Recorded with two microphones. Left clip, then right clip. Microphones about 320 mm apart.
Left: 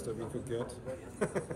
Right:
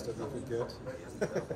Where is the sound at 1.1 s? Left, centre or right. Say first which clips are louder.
Right 1 dB; left.